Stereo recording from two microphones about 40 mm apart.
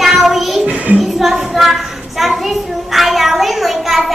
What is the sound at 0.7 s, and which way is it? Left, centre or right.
Child singing, right.